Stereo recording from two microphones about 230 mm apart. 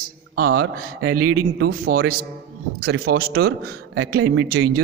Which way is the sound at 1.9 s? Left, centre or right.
Right.